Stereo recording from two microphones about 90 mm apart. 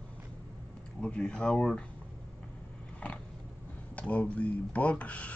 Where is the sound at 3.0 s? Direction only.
15° left (ahead or behind).